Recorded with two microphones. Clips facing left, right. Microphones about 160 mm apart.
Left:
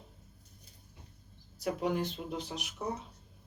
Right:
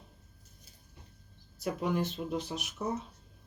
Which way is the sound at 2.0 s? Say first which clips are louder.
Right 3 dB; 15° left (ahead or behind).